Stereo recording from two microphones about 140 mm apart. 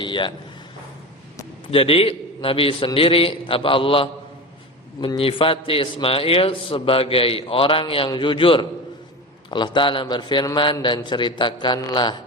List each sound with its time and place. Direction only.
0.0 s a man's voice: 35° left (ahead or behind)
1.6 s a man's voice: 40° left (ahead or behind)